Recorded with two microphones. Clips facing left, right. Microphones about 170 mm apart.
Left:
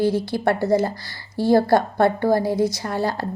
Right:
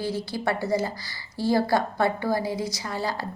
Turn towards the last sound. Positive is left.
turn(degrees=55)  # may be behind; listen again after turning